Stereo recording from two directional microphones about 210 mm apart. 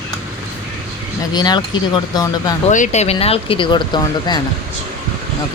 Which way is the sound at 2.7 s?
35° left (ahead or behind).